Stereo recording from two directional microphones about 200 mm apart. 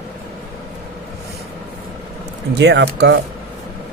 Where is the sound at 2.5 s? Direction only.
60° right (ahead or behind).